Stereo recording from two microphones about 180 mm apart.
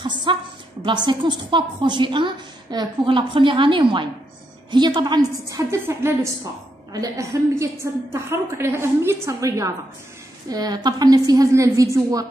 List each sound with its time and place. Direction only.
0.0 s a woman's voice: 25° right (ahead or behind)